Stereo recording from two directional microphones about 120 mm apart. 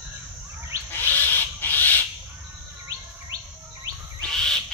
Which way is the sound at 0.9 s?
15° left (ahead or behind).